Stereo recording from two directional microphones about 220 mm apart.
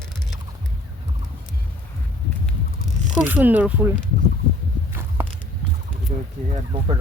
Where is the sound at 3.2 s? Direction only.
5° right (ahead or behind).